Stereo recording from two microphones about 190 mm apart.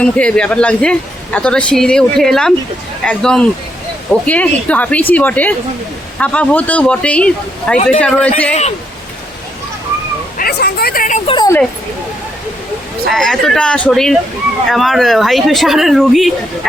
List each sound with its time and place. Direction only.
0.0 s a man's voice: 5° left (ahead or behind)
10.3 s a sound: 55° left (ahead or behind)
11.3 s speech: 20° left (ahead or behind)
13.1 s a man's voice: centre (ahead or behind)